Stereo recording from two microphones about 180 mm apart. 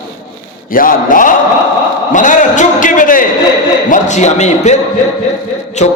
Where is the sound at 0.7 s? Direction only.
50° left (ahead or behind).